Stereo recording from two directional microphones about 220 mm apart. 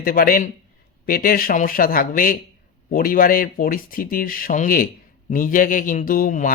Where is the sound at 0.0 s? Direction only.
40° left (ahead or behind).